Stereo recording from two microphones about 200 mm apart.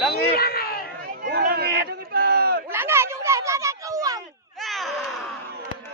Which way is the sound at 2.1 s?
50° right (ahead or behind).